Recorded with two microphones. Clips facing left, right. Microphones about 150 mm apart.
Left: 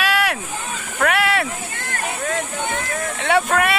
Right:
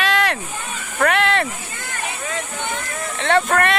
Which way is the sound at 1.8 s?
55° left (ahead or behind).